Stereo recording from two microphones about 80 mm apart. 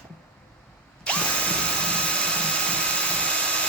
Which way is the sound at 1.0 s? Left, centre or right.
Centre.